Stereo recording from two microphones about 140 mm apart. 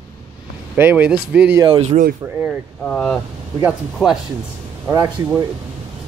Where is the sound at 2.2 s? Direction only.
20° right (ahead or behind).